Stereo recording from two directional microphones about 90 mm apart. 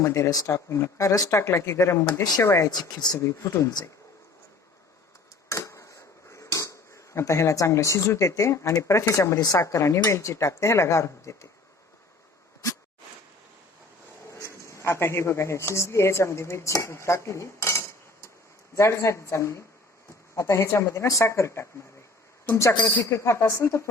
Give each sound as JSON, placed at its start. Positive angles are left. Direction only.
{"t": 0.0, "sound": "speech", "side_deg": 40}
{"t": 2.6, "sound": "speech", "side_deg": 50}
{"t": 3.2, "sound": "speech", "side_deg": 35}
{"t": 5.5, "sound": "a sound", "side_deg": 35}
{"t": 9.4, "sound": "speech", "side_deg": 40}
{"t": 14.3, "sound": "speech", "side_deg": 35}